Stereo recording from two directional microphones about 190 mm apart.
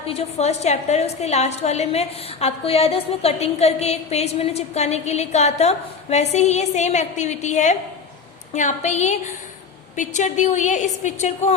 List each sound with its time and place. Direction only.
0.0 s a woman's voice: 35° left (ahead or behind)